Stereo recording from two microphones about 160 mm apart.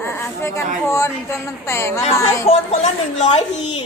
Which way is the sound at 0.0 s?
15° left (ahead or behind).